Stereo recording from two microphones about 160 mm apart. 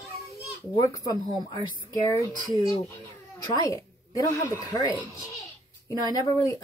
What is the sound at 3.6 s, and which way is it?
A woman's voice, 20° left (ahead or behind).